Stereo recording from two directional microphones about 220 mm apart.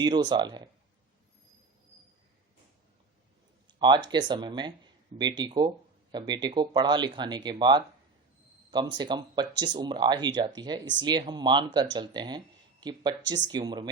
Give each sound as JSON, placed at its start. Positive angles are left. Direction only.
{"t": 0.0, "sound": "speech", "side_deg": -20}
{"t": 3.8, "sound": "speech", "side_deg": -20}